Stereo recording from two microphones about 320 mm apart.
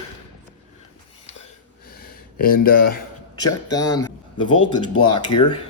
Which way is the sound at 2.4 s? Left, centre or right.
Left.